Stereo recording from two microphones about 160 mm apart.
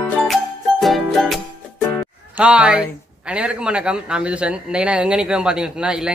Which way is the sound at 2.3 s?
5° right (ahead or behind).